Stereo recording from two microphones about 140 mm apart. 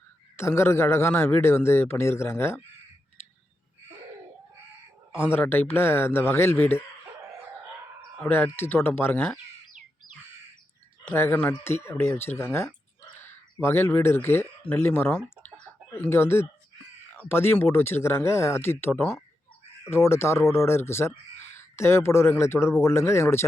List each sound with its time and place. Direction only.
0.3 s a man's voice: 20° left (ahead or behind)
5.1 s a man's voice: 15° left (ahead or behind)
8.2 s a man's voice: 15° left (ahead or behind)
11.0 s a man's voice: 15° left (ahead or behind)
15.4 s chicken: 15° left (ahead or behind)
17.2 s a man's voice: 15° left (ahead or behind)